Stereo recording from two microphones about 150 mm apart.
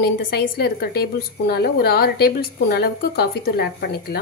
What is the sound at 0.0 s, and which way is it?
A woman's voice, 90° left.